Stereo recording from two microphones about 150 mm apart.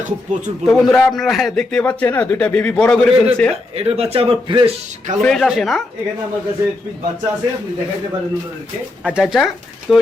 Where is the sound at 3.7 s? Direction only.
45° right (ahead or behind).